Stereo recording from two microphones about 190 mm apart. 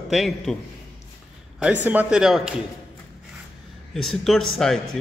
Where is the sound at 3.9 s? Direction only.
Centre (ahead or behind).